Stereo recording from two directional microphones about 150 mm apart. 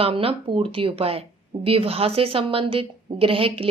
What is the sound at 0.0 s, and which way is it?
Speech, 40° right (ahead or behind).